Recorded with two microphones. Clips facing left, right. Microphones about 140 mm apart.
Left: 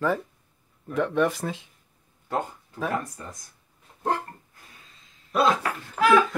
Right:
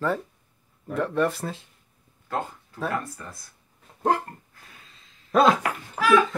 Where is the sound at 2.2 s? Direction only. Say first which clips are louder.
Left 1 dB; 20° left (ahead or behind).